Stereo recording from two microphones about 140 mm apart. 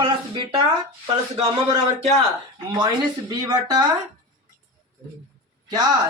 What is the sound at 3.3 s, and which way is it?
Speech, 30° right (ahead or behind).